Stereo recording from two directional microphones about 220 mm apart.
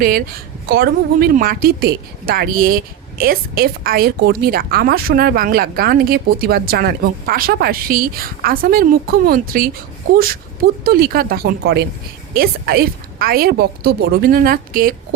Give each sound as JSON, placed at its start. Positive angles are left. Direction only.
{"t": 0.0, "sound": "a woman's voice", "side_deg": -40}
{"t": 10.8, "sound": "a woman's voice", "side_deg": -45}